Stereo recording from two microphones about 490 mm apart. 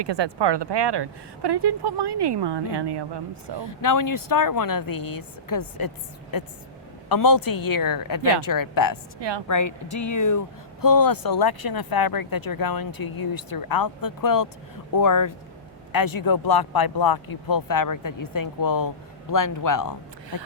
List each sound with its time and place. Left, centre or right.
0.0 s speech: right
3.6 s speech: left